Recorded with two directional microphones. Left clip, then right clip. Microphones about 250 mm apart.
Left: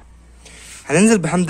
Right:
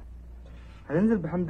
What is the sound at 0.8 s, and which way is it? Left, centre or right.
Speech, left.